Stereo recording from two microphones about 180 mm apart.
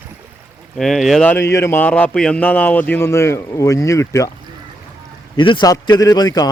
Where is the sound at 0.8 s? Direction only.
Centre (ahead or behind).